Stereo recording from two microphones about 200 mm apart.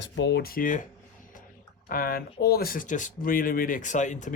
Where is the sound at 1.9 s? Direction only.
45° left (ahead or behind).